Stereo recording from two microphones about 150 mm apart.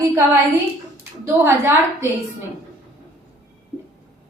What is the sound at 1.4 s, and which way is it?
Speech, 20° right (ahead or behind).